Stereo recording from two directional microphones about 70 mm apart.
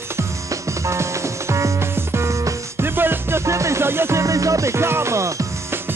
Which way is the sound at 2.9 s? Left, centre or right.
Right.